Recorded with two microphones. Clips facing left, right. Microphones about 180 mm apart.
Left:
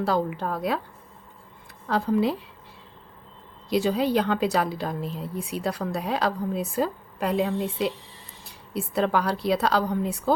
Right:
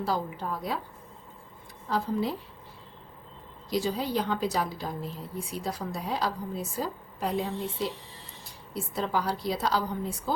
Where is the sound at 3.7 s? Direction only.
65° left (ahead or behind).